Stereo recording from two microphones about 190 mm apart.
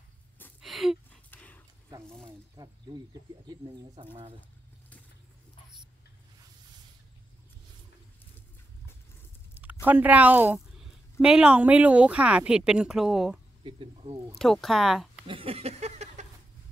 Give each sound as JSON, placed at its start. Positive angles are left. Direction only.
{"t": 0.6, "sound": "gasp", "side_deg": 0}
{"t": 1.3, "sound": "dog", "side_deg": 10}
{"t": 2.6, "sound": "speech", "side_deg": -20}
{"t": 3.9, "sound": "speech", "side_deg": -25}
{"t": 4.4, "sound": "vehicle", "side_deg": 10}
{"t": 9.5, "sound": "a sound", "side_deg": -10}
{"t": 9.8, "sound": "speech", "side_deg": -10}
{"t": 13.7, "sound": "speech", "side_deg": -25}
{"t": 14.4, "sound": "speech", "side_deg": 0}
{"t": 15.2, "sound": "a sound", "side_deg": -30}